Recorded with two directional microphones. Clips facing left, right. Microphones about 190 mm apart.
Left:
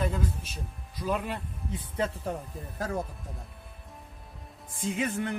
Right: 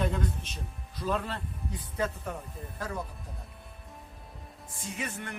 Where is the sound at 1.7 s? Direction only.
30° left (ahead or behind).